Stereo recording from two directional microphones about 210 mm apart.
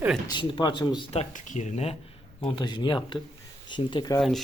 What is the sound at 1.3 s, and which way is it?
Speech, 35° left (ahead or behind).